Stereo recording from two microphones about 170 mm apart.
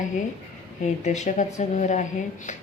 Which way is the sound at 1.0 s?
45° left (ahead or behind).